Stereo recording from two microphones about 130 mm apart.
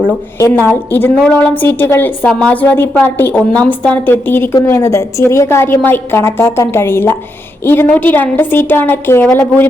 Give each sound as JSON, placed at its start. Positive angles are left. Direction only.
{"t": 0.3, "sound": "a woman's voice", "side_deg": 20}